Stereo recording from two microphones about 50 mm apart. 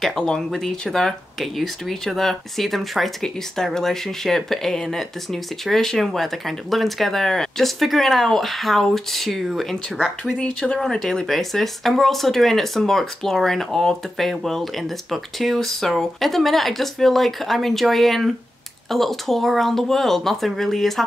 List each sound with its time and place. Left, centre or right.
0.2 s speech: centre
10.3 s speech: left
10.8 s speech: centre